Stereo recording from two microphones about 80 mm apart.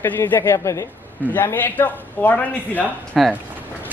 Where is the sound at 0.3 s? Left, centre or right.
Left.